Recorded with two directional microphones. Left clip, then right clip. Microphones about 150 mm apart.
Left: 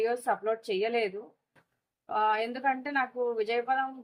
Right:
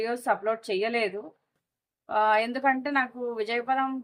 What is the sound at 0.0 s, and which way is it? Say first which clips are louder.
Speech: right 2 dB; 55° right (ahead or behind).